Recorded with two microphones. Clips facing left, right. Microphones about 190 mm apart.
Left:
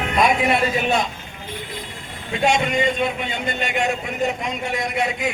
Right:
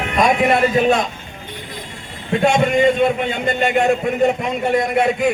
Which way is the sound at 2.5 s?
50° right (ahead or behind).